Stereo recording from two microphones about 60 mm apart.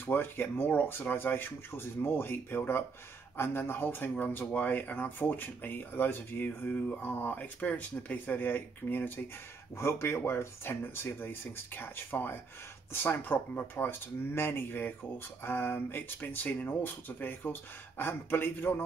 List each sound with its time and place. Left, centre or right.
0.0 s speech: left
9.8 s speech: left